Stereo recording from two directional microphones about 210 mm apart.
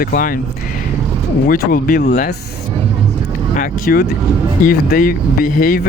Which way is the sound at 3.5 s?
45° left (ahead or behind).